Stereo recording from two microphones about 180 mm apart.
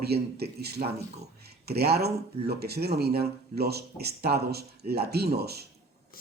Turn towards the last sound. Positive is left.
turn(degrees=-60)  # may be behind; listen again after turning